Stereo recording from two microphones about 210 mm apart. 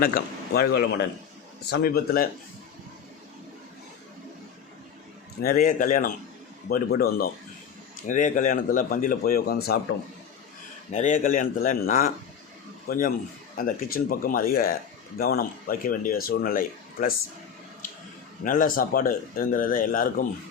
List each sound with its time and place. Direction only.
0.0 s a man's voice: 45° left (ahead or behind)
5.4 s a man's voice: 45° left (ahead or behind)
10.9 s a man's voice: 35° left (ahead or behind)
18.4 s a man's voice: 40° left (ahead or behind)